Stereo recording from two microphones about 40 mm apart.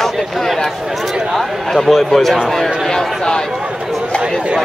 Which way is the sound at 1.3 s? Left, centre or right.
Centre.